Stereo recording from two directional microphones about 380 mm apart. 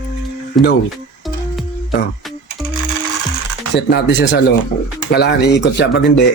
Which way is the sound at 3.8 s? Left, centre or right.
Left.